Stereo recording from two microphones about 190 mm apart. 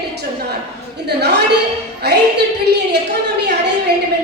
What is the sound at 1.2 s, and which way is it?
A woman's voice, 60° right (ahead or behind).